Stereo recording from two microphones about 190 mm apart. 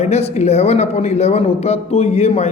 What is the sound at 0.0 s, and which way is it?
Speech, 35° left (ahead or behind).